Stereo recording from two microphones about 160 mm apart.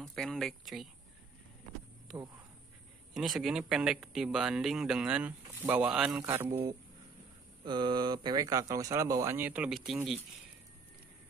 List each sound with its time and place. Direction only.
0.0 s speech: 5° left (ahead or behind)
2.1 s speech: centre (ahead or behind)
6.5 s speech: 35° right (ahead or behind); by 9.9 s centre (ahead or behind)